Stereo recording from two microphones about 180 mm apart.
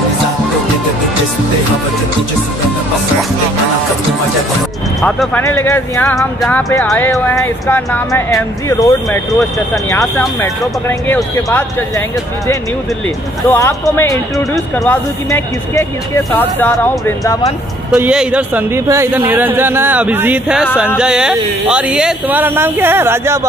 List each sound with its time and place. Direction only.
5.0 s speech: 5° left (ahead or behind)
13.5 s speech: 15° left (ahead or behind)
17.9 s a man's voice: 5° right (ahead or behind)